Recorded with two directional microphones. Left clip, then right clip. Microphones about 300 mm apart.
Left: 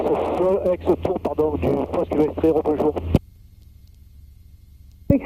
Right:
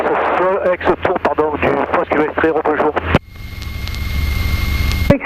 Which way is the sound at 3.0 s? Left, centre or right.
Centre.